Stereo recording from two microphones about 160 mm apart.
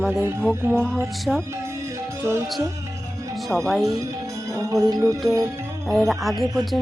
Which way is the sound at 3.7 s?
Centre (ahead or behind).